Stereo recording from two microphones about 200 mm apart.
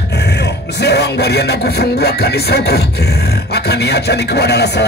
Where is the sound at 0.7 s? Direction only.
55° left (ahead or behind).